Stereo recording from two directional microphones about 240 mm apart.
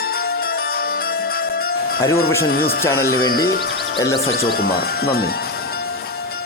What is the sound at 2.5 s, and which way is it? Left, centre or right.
Speech, left.